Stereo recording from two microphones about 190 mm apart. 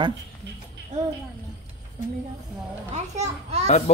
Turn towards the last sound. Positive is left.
turn(degrees=-35)  # may be behind; listen again after turning